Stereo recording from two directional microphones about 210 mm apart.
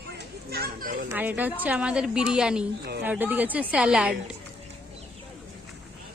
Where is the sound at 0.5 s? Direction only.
45° right (ahead or behind).